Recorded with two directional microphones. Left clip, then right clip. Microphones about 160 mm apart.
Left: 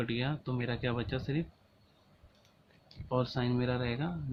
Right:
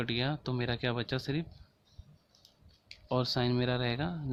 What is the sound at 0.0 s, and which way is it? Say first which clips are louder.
Speech: right 2 dB; 65° right (ahead or behind).